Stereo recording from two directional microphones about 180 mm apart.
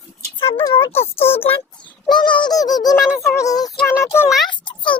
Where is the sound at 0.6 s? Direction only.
25° left (ahead or behind).